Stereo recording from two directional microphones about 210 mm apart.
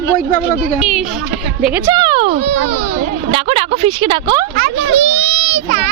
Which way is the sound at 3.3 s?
30° right (ahead or behind).